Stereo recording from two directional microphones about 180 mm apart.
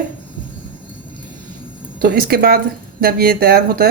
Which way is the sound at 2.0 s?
55° right (ahead or behind).